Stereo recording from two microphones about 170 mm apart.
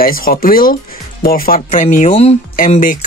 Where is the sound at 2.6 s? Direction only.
50° left (ahead or behind).